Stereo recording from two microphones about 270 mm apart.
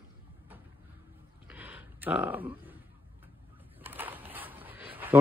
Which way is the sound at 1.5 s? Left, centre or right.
Centre.